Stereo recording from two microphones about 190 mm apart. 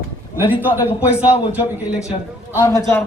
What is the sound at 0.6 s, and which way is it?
Speech, 15° left (ahead or behind).